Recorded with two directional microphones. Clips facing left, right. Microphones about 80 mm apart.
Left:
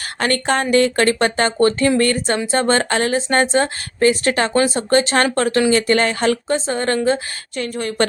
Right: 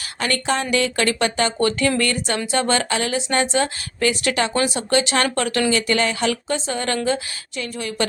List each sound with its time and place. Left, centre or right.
0.2 s a woman's voice: left